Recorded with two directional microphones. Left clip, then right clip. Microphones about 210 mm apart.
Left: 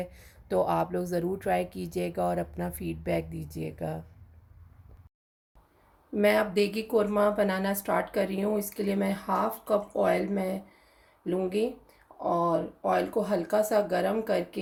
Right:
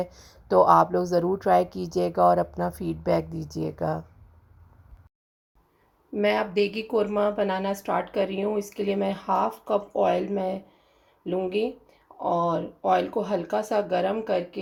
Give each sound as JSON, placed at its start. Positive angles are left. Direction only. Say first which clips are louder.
{"t": 0.3, "sound": "speech", "louder": "right 9 dB", "side_deg": -10}
{"t": 6.1, "sound": "speech", "louder": "right 1 dB", "side_deg": -5}